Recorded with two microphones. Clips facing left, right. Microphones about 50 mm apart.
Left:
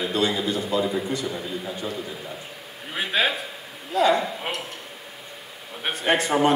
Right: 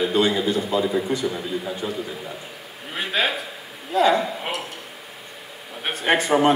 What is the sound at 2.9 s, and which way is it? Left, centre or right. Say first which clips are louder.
Speech: even; centre.